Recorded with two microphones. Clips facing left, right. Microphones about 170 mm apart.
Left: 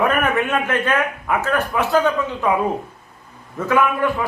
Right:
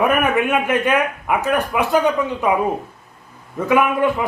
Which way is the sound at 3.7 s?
15° right (ahead or behind).